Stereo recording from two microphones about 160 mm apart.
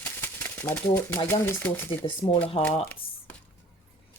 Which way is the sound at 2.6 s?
35° left (ahead or behind).